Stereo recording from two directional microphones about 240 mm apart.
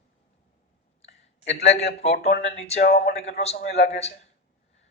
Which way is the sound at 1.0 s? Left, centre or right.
Left.